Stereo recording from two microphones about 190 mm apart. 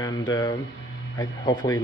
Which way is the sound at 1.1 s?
20° left (ahead or behind).